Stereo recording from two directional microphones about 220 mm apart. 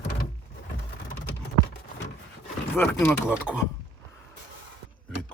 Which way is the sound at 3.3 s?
5° right (ahead or behind).